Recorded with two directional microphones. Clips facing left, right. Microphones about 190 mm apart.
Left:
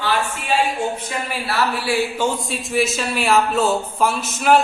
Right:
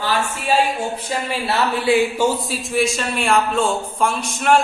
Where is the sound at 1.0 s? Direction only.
30° right (ahead or behind).